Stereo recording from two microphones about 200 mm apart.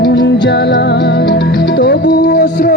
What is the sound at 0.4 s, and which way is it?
Music, 55° left (ahead or behind).